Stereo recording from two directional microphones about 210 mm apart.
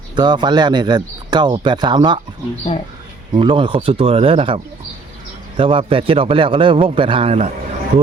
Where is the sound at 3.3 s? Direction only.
25° right (ahead or behind).